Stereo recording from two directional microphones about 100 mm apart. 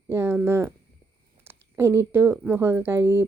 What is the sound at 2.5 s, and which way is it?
Speech, 20° right (ahead or behind).